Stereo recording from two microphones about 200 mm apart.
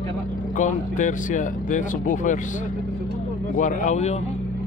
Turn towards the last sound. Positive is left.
turn(degrees=35)  # may be behind; listen again after turning